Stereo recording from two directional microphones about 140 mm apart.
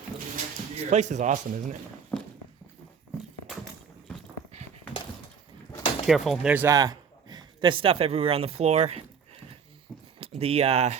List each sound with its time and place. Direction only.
0.8 s a man's voice: 55° right (ahead or behind)
2.1 s clip-clop: 10° left (ahead or behind)
5.7 s a sound: 35° left (ahead or behind)
6.1 s speech: centre (ahead or behind)
6.7 s speech: 25° right (ahead or behind); by 10.9 s 50° right (ahead or behind)